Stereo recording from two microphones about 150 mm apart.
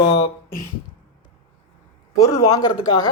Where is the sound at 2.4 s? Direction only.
25° left (ahead or behind).